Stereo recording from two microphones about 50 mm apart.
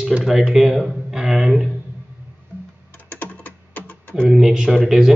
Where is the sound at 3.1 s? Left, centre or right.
Left.